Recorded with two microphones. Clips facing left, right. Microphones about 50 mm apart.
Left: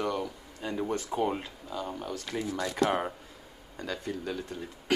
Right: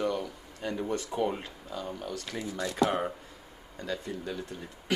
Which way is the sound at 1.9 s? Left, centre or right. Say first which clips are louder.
Left 2 dB; centre.